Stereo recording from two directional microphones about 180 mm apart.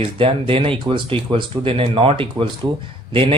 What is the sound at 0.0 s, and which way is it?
Speech, 30° right (ahead or behind).